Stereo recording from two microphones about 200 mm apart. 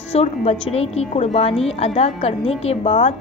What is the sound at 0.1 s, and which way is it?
A woman's voice, 30° left (ahead or behind).